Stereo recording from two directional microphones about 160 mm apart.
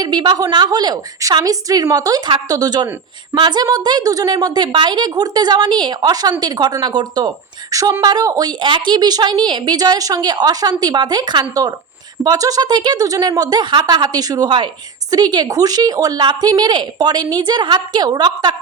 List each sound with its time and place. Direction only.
0.0 s a woman's voice: 25° right (ahead or behind)